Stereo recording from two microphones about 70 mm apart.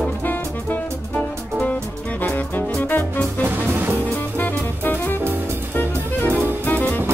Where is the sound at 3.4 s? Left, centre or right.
Right.